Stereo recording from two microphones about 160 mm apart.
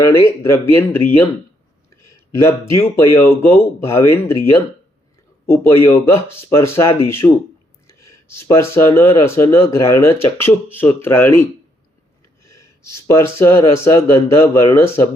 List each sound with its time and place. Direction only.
0.3 s speech: 15° left (ahead or behind)
2.4 s speech: 15° left (ahead or behind)
12.4 s speech: 20° left (ahead or behind)